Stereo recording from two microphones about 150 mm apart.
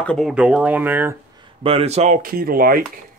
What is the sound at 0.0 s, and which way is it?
Speech, 5° left (ahead or behind).